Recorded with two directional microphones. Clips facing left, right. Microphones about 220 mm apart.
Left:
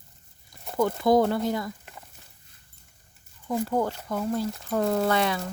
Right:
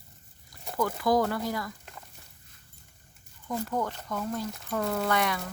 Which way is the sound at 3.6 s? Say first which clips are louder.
Left 5 dB; 30° left (ahead or behind).